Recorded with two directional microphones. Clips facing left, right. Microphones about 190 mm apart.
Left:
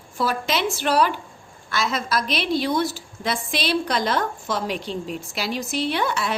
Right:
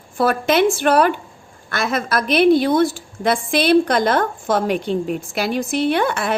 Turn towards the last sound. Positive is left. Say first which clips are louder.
# right 5 dB
turn(degrees=-55)  # may be behind; listen again after turning